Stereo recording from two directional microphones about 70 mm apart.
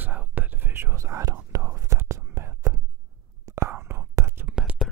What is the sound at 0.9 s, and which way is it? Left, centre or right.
Whispering, right.